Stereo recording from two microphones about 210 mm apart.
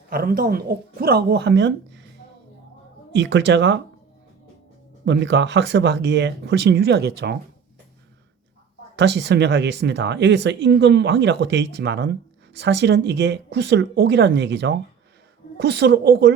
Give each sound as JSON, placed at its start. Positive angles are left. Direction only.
{"t": 0.1, "sound": "speech", "side_deg": -45}
{"t": 3.1, "sound": "speech", "side_deg": -60}
{"t": 5.0, "sound": "speech", "side_deg": -55}
{"t": 9.0, "sound": "speech", "side_deg": -55}